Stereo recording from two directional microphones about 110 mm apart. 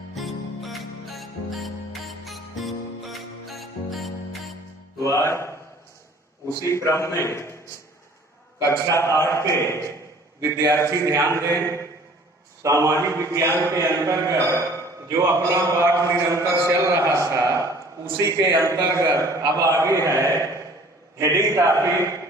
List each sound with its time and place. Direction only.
0.1 s music: centre (ahead or behind)
5.1 s a man's voice: 25° left (ahead or behind)
6.7 s a man's voice: 25° left (ahead or behind)
8.6 s a man's voice: 25° left (ahead or behind)
10.4 s a man's voice: 30° right (ahead or behind)
12.6 s a man's voice: 30° right (ahead or behind)